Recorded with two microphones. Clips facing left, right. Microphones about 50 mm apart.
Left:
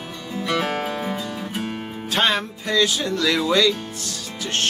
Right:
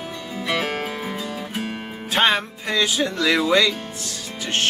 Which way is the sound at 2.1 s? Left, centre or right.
Centre.